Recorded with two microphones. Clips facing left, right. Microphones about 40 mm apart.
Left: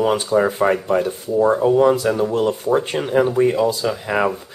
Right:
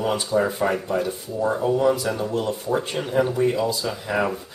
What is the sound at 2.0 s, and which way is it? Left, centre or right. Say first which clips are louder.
Speech: left 7 dB; left.